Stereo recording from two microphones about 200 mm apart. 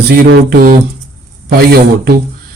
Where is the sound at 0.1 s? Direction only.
45° right (ahead or behind).